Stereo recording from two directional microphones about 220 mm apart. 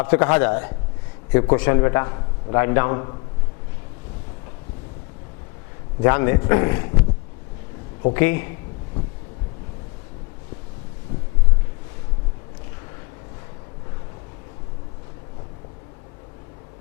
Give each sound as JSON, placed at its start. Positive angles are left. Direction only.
{"t": 0.0, "sound": "a man's voice", "side_deg": 10}
{"t": 6.0, "sound": "a man's voice", "side_deg": 15}
{"t": 8.1, "sound": "a man's voice", "side_deg": 15}